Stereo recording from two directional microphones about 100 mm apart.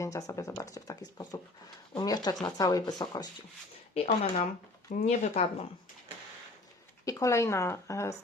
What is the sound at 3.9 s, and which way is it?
Speech, 90° left.